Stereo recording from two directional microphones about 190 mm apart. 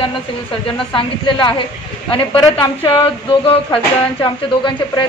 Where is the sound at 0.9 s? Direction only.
25° left (ahead or behind).